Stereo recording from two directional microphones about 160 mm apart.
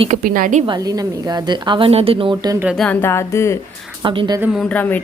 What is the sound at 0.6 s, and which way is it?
Speech, 25° right (ahead or behind).